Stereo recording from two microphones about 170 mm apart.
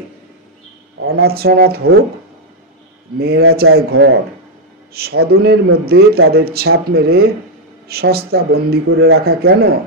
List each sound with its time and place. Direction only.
1.2 s a man's voice: 65° right (ahead or behind)
3.2 s a man's voice: 65° right (ahead or behind)